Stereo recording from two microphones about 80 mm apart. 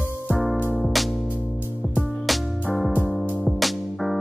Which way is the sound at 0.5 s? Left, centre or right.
Left.